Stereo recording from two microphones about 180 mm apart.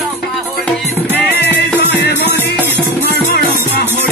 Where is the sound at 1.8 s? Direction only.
65° left (ahead or behind).